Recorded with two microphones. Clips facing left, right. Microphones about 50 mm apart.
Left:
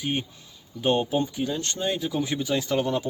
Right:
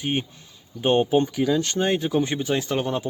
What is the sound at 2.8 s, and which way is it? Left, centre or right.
Speech, right.